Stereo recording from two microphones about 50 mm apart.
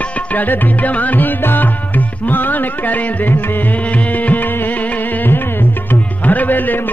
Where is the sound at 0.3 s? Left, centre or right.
Left.